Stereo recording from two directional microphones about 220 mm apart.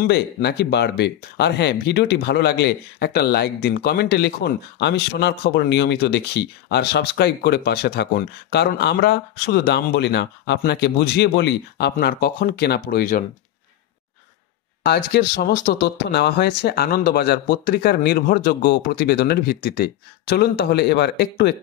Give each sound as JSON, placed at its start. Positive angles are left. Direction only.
{"t": 0.0, "sound": "speech", "side_deg": 50}
{"t": 14.9, "sound": "speech", "side_deg": 45}